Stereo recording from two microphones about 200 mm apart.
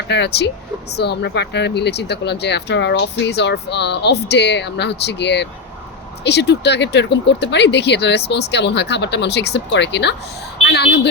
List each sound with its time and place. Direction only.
0.1 s speech: 55° left (ahead or behind)